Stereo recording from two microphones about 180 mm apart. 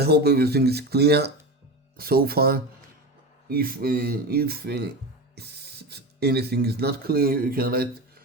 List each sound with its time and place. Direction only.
0.0 s speech: 65° right (ahead or behind)